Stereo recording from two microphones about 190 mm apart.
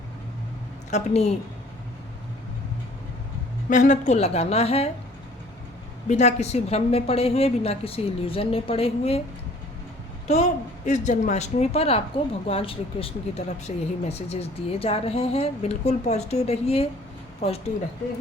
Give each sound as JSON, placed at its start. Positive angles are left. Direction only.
{"t": 0.9, "sound": "a woman's voice", "side_deg": 35}
{"t": 3.7, "sound": "speech", "side_deg": 40}
{"t": 6.1, "sound": "speech", "side_deg": 35}
{"t": 10.2, "sound": "speech", "side_deg": 35}